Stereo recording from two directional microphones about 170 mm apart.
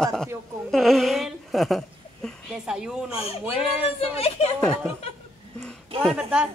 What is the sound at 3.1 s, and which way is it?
Speech, 35° left (ahead or behind).